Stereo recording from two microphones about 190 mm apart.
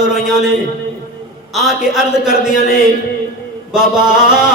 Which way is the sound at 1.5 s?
Centre (ahead or behind).